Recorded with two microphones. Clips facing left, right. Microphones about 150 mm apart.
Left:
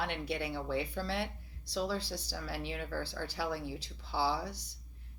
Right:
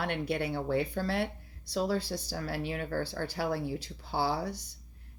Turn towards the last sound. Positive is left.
turn(degrees=-50)  # may be behind; listen again after turning